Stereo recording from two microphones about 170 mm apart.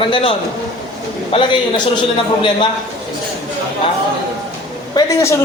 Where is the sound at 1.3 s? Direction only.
30° left (ahead or behind).